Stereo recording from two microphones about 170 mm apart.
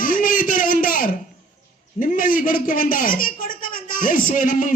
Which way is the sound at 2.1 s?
55° left (ahead or behind).